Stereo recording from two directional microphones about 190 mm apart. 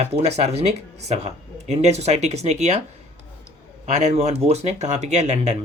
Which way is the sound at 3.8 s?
35° right (ahead or behind).